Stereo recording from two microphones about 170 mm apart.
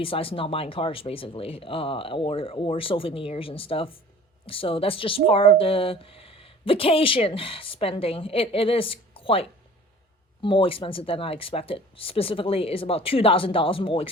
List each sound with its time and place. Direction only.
0.0 s speech: 35° left (ahead or behind)